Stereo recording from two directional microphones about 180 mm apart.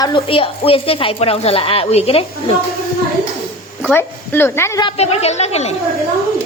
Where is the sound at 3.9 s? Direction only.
10° left (ahead or behind).